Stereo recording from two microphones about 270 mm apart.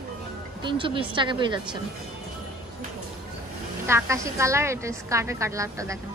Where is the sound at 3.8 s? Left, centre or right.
Centre.